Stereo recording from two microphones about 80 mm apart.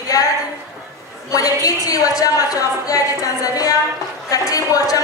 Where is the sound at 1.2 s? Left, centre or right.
Left.